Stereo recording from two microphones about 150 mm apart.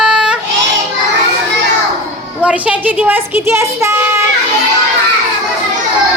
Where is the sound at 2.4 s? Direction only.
10° right (ahead or behind).